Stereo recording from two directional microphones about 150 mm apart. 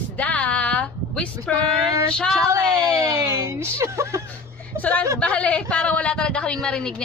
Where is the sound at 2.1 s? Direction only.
5° left (ahead or behind).